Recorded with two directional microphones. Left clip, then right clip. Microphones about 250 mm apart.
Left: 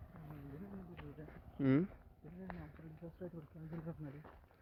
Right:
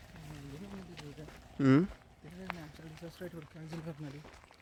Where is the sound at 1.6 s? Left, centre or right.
Right.